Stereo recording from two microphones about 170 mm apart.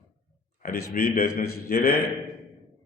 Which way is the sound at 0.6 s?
65° left (ahead or behind).